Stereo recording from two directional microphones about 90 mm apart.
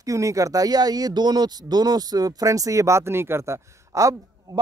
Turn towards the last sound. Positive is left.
turn(degrees=-35)  # may be behind; listen again after turning